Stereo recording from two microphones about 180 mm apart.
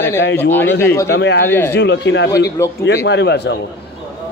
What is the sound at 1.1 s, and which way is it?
Speech, 70° left (ahead or behind).